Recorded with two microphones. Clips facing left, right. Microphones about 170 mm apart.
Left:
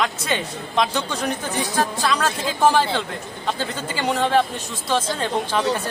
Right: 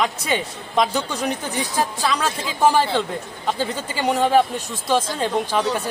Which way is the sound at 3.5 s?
10° right (ahead or behind).